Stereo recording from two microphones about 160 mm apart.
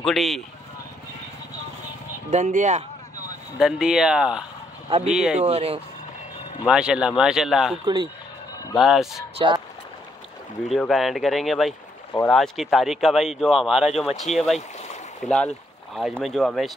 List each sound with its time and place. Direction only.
0.0 s speech: centre (ahead or behind)
2.3 s speech: 50° right (ahead or behind)
3.5 s speech: 5° right (ahead or behind)
4.8 s speech: 35° right (ahead or behind)
5.1 s speech: 5° right (ahead or behind)
5.4 s speech: 40° right (ahead or behind)
6.7 s speech: 5° right (ahead or behind)
7.8 s speech: 30° right (ahead or behind)
8.7 s speech: centre (ahead or behind)
10.7 s speech: centre (ahead or behind)